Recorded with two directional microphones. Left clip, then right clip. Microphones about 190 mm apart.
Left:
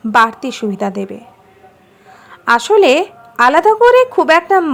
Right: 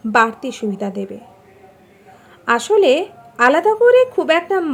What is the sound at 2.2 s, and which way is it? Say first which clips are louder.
A woman's voice: left 5 dB; 20° left (ahead or behind).